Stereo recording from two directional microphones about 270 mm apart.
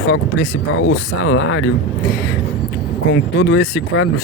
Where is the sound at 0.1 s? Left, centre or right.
Left.